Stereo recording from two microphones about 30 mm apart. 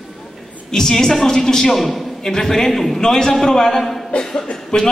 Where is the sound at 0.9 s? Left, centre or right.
Centre.